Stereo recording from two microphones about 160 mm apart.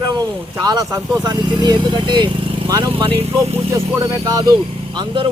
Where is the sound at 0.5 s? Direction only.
20° right (ahead or behind).